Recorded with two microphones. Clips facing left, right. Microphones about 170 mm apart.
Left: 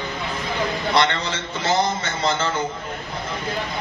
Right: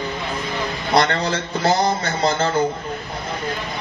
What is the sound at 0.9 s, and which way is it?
A man's voice, 40° right (ahead or behind).